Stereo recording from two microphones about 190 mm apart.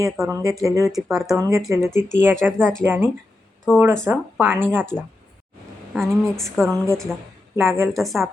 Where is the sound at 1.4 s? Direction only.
15° right (ahead or behind).